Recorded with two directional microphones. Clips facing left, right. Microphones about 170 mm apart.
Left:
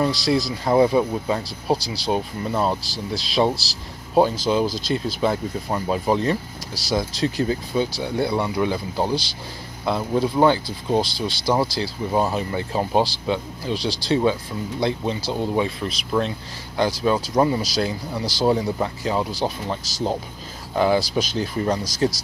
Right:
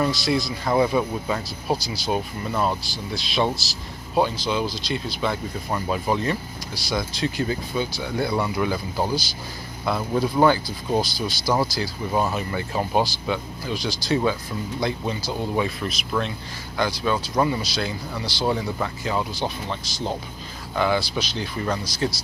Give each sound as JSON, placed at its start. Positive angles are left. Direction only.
{"t": 0.0, "sound": "speech", "side_deg": 35}